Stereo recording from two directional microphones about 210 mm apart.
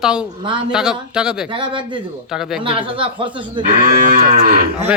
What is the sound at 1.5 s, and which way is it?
Speech, 25° right (ahead or behind).